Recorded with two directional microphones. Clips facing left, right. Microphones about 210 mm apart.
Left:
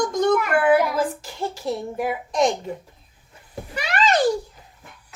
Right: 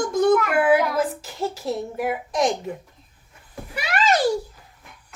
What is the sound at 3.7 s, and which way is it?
Speech, 10° right (ahead or behind).